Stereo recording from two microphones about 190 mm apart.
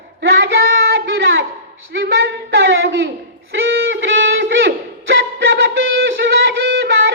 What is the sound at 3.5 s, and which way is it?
Music, 70° right (ahead or behind).